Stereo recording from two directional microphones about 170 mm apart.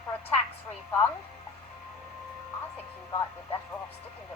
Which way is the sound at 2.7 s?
15° left (ahead or behind).